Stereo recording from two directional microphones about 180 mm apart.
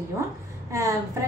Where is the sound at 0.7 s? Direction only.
15° right (ahead or behind).